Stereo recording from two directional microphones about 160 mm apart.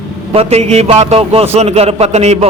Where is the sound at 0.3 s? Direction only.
40° right (ahead or behind).